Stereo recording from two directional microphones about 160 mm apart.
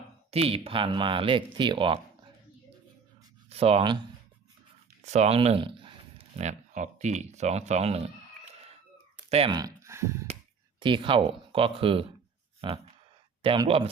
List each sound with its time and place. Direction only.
0.3 s speech: 35° right (ahead or behind)
3.5 s speech: 40° right (ahead or behind)
5.0 s speech: 45° right (ahead or behind)
9.3 s speech: 40° right (ahead or behind)
9.6 s speech: 20° right (ahead or behind)
10.8 s speech: 30° right (ahead or behind)
13.4 s speech: 35° right (ahead or behind)